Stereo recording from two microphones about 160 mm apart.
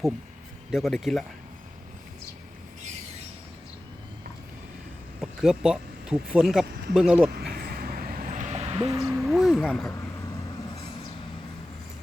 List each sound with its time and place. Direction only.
0.7 s speech: centre (ahead or behind)
5.2 s speech: 5° right (ahead or behind)
7.3 s a sound: 80° right; by 8.9 s 40° right (ahead or behind)
9.0 s speech: centre (ahead or behind)